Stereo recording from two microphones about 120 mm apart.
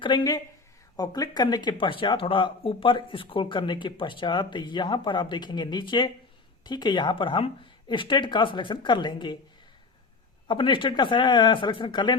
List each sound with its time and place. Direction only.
0.0 s speech: 40° left (ahead or behind)
10.5 s speech: 45° left (ahead or behind)